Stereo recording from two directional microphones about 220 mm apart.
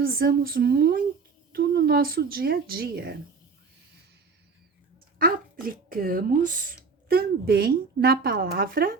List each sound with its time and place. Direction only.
0.0 s a woman's voice: 40° right (ahead or behind)
5.6 s a woman's voice: 40° right (ahead or behind)